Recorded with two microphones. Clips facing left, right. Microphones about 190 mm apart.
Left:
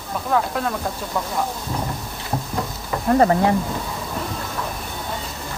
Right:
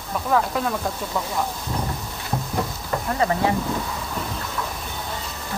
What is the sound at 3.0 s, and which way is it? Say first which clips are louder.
Speech: left 7 dB; 40° left (ahead or behind).